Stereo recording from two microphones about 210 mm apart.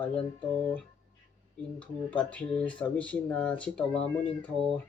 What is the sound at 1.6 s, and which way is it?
Speech, 5° left (ahead or behind).